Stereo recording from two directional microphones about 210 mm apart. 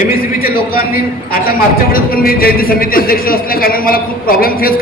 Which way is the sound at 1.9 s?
45° left (ahead or behind).